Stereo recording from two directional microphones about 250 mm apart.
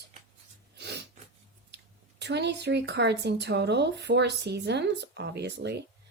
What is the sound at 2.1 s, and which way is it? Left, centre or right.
Speech, right.